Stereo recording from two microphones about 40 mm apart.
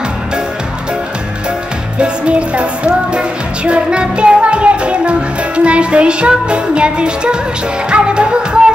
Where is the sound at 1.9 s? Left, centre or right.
Right.